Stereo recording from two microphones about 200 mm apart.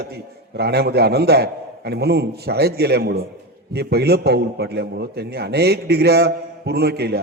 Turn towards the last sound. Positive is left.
turn(degrees=-55)  # may be behind; listen again after turning